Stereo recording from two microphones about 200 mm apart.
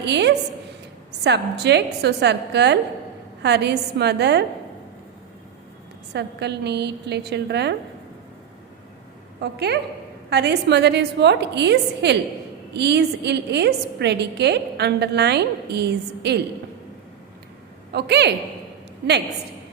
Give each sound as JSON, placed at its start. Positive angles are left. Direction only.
{"t": 0.0, "sound": "a woman's voice", "side_deg": -60}
{"t": 6.1, "sound": "a woman's voice", "side_deg": -55}
{"t": 9.4, "sound": "a woman's voice", "side_deg": -55}
{"t": 17.9, "sound": "a woman's voice", "side_deg": -55}